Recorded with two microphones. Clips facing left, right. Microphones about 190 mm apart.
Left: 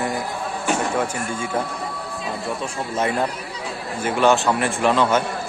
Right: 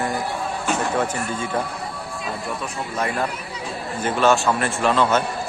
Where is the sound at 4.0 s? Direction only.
10° left (ahead or behind).